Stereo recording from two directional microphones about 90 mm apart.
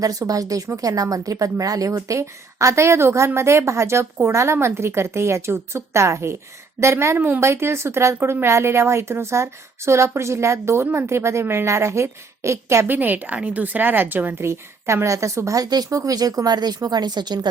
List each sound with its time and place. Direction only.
0.0 s a woman's voice: 40° right (ahead or behind)